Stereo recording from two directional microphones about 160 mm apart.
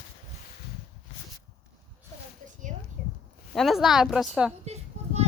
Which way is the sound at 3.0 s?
50° right (ahead or behind).